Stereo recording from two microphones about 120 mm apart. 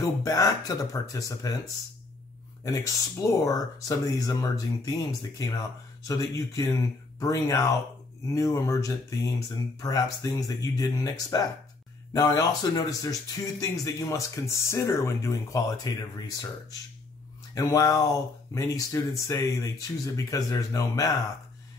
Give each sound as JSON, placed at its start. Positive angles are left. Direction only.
{"t": 0.2, "sound": "speech", "side_deg": 30}
{"t": 2.6, "sound": "speech", "side_deg": 25}
{"t": 17.6, "sound": "speech", "side_deg": 30}